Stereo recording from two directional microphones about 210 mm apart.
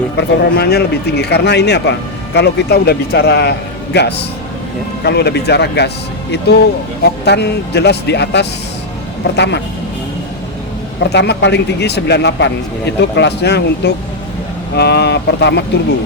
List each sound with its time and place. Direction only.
0.2 s speech: 50° left (ahead or behind)
7.0 s speech: 55° left (ahead or behind)
11.1 s speech: 55° left (ahead or behind)